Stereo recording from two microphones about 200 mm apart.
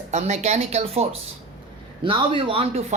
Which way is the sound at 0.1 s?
35° right (ahead or behind).